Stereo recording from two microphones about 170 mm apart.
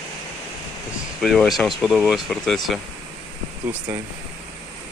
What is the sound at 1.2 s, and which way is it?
Speech, centre (ahead or behind).